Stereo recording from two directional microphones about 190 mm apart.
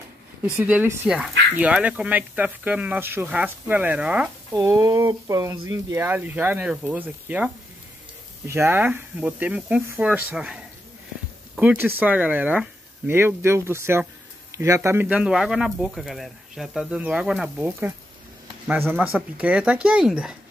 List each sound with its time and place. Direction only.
0.6 s speech: 10° right (ahead or behind)
4.6 s speech: 20° right (ahead or behind)